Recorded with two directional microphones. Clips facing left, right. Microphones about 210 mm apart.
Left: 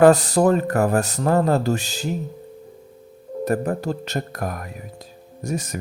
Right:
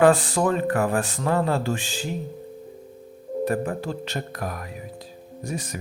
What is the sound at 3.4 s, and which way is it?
Speech, 40° left (ahead or behind).